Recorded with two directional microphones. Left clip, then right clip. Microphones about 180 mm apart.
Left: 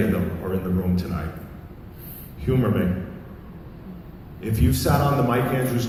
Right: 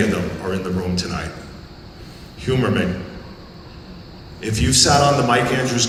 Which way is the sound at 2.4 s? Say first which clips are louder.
Right 4 dB; 40° right (ahead or behind).